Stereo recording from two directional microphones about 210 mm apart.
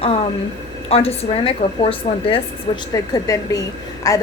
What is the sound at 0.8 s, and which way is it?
A woman's voice, 30° left (ahead or behind).